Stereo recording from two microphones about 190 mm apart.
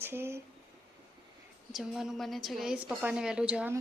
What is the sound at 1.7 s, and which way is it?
A woman's voice, centre (ahead or behind).